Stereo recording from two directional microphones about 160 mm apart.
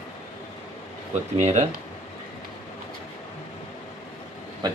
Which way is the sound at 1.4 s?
45° right (ahead or behind).